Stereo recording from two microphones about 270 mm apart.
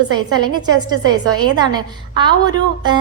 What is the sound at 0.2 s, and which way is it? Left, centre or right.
A woman's voice, centre.